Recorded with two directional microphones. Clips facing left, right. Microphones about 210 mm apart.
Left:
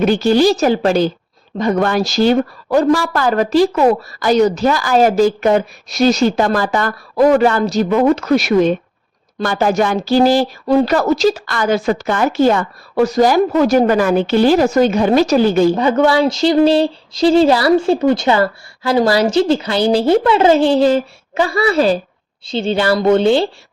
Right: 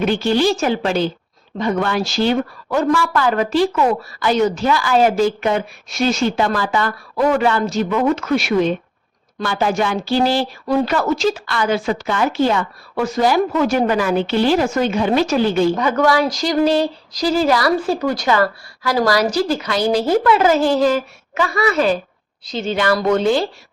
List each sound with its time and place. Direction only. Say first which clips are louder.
0.0 s a woman's voice: left 4 dB; 40° left (ahead or behind)
15.7 s speech: left 3 dB; 30° left (ahead or behind)